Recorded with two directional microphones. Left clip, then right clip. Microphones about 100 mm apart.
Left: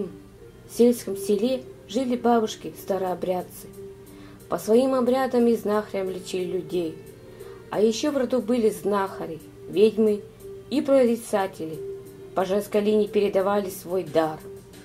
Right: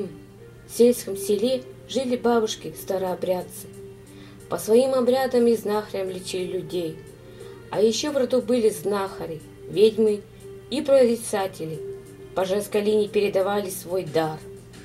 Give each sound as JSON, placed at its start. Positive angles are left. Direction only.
{"t": 0.7, "sound": "speech", "side_deg": 5}
{"t": 4.5, "sound": "speech", "side_deg": 5}
{"t": 12.4, "sound": "speech", "side_deg": 5}